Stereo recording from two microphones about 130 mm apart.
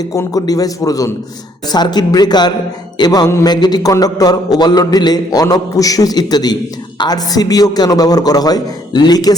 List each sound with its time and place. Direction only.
0.0 s a man's voice: 25° left (ahead or behind)